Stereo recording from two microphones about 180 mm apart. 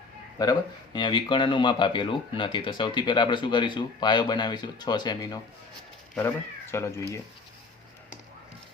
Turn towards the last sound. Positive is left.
turn(degrees=15)  # may be behind; listen again after turning